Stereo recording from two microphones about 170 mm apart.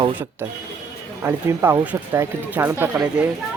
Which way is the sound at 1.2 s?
15° right (ahead or behind).